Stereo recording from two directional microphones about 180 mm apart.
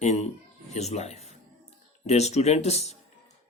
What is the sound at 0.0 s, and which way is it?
Speech, 35° left (ahead or behind).